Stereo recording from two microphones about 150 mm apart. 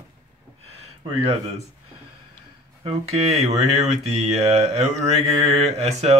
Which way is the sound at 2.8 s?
45° right (ahead or behind).